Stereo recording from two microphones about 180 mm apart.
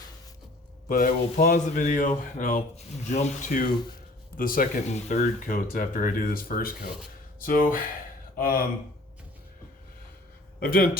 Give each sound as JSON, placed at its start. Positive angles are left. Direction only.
{"t": 0.9, "sound": "speech", "side_deg": 50}
{"t": 10.6, "sound": "speech", "side_deg": 55}